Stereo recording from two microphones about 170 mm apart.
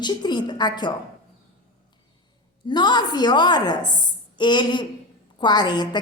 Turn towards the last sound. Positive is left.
turn(degrees=25)  # may be behind; listen again after turning